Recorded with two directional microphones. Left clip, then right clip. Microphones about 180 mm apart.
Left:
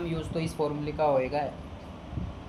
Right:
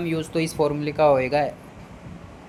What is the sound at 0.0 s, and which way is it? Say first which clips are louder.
Speech: right 8 dB; 45° right (ahead or behind).